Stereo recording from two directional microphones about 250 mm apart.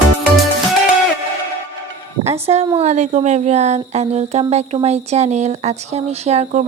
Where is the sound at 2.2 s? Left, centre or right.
Right.